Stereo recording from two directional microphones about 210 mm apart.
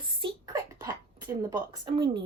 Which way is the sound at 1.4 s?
20° right (ahead or behind).